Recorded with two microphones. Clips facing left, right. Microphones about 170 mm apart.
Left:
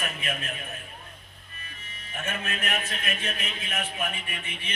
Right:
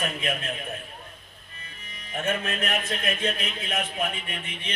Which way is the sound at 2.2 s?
35° right (ahead or behind).